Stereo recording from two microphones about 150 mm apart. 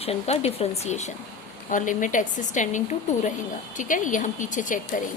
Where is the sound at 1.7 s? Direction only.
60° left (ahead or behind).